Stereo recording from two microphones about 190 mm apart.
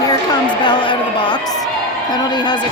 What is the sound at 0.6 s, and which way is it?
A woman's voice, 25° left (ahead or behind).